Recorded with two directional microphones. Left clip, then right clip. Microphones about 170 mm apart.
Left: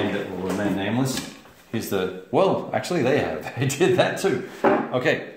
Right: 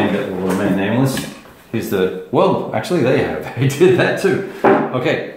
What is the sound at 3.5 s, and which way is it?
Speech, 50° left (ahead or behind).